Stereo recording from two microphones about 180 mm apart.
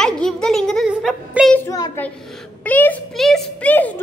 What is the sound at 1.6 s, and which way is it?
A woman's voice, 15° left (ahead or behind).